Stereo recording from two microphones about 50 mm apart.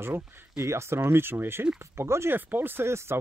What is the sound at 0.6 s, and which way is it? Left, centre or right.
Speech, right.